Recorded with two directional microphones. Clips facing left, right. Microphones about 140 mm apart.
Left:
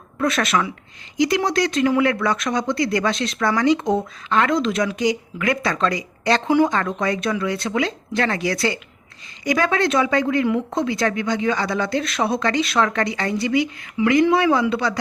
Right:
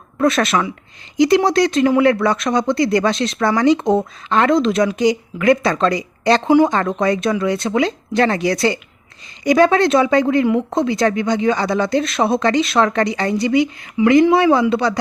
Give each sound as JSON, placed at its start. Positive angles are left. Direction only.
{"t": 0.2, "sound": "a woman's voice", "side_deg": -30}